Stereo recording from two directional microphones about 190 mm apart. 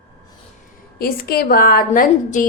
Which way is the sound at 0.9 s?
55° left (ahead or behind).